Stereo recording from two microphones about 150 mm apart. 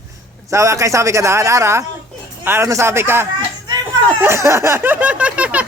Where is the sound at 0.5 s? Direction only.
20° right (ahead or behind).